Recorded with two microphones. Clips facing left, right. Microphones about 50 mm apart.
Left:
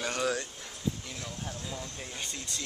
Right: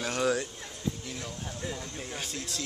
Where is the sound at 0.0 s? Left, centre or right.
Centre.